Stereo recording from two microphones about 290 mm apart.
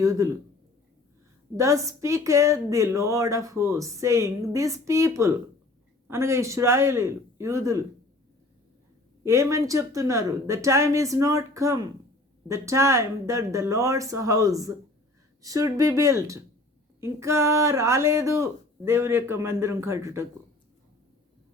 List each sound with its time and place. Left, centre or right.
0.0 s a woman's voice: centre
1.5 s a woman's voice: centre
9.2 s a woman's voice: centre